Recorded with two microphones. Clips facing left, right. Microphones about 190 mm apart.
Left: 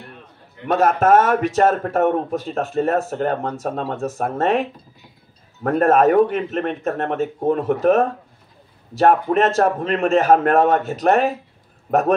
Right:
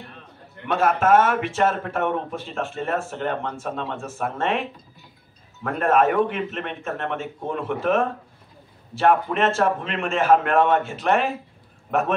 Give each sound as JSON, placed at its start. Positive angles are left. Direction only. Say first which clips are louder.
{"t": 0.7, "sound": "speech", "louder": "left 3 dB", "side_deg": 40}